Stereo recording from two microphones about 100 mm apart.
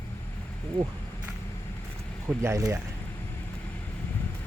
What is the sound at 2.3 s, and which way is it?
Speech, 30° right (ahead or behind).